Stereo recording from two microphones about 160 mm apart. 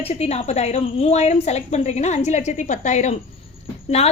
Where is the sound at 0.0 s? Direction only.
40° left (ahead or behind).